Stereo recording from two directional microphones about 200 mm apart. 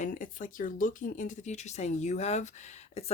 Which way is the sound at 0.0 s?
40° left (ahead or behind).